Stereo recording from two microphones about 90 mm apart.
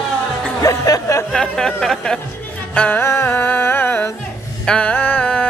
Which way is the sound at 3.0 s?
30° left (ahead or behind).